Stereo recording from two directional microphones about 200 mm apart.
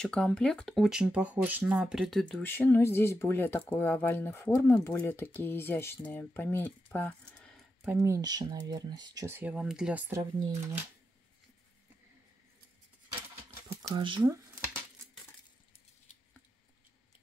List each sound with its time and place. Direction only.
0.0 s speech: 5° left (ahead or behind)
7.8 s speech: 10° right (ahead or behind)
13.8 s speech: 25° right (ahead or behind)